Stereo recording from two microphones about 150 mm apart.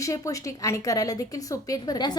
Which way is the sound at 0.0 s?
20° left (ahead or behind).